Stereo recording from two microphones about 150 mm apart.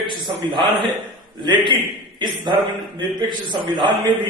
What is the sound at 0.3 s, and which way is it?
A man's voice, 35° right (ahead or behind).